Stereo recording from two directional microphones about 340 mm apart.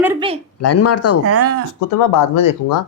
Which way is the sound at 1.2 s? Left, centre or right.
Right.